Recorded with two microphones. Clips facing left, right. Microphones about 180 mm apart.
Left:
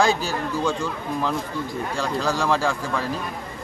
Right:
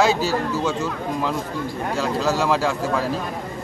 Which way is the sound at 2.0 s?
5° right (ahead or behind).